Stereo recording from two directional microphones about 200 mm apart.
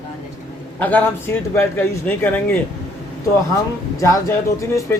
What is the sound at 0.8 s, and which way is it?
A man's voice, 10° left (ahead or behind).